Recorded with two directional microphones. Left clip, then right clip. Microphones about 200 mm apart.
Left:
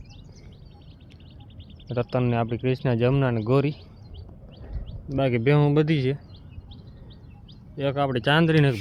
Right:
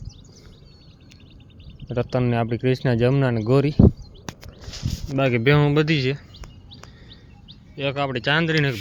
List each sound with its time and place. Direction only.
1.9 s speech: 10° right (ahead or behind)
5.1 s speech: 5° right (ahead or behind)
7.8 s speech: 10° left (ahead or behind)